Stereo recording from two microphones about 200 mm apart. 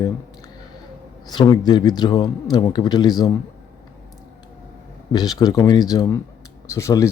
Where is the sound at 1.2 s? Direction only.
20° left (ahead or behind).